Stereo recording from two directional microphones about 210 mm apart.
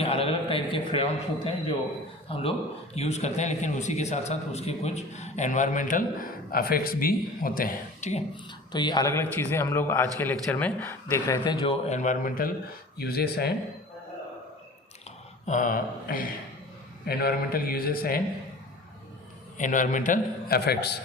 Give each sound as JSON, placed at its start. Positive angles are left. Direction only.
{"t": 0.0, "sound": "a sound", "side_deg": 25}
{"t": 2.3, "sound": "a man's voice", "side_deg": 25}
{"t": 8.7, "sound": "a man's voice", "side_deg": 20}
{"t": 15.4, "sound": "a man's voice", "side_deg": 40}
{"t": 19.5, "sound": "a man's voice", "side_deg": 35}